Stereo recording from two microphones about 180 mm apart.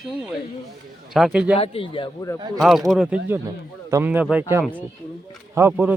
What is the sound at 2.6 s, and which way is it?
Speech, centre (ahead or behind).